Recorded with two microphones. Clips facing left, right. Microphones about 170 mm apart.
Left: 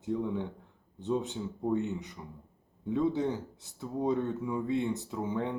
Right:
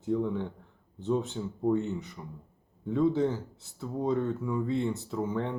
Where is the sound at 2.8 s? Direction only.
15° left (ahead or behind).